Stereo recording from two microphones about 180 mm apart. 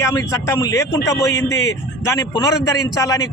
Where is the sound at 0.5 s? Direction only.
20° left (ahead or behind).